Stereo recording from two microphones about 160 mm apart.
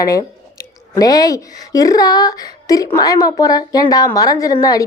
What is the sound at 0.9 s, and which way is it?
Speech, 25° left (ahead or behind).